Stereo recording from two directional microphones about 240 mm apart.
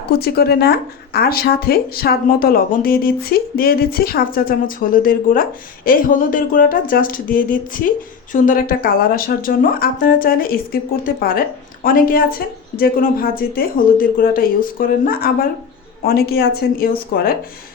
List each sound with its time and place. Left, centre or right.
0.1 s speech: left